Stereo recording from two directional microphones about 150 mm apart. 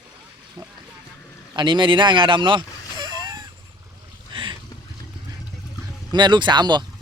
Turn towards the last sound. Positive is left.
turn(degrees=-30)  # may be behind; listen again after turning